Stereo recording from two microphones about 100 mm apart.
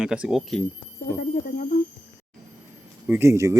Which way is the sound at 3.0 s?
20° right (ahead or behind).